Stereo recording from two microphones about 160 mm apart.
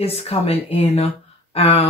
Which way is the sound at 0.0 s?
40° left (ahead or behind).